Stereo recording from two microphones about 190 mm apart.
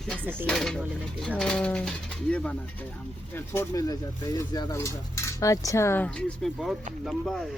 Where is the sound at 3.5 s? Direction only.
20° left (ahead or behind).